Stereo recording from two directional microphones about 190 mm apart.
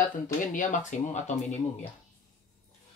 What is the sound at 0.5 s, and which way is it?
Speech, 40° left (ahead or behind).